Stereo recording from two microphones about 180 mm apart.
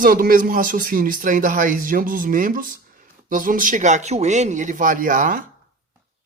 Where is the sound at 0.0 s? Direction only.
50° right (ahead or behind).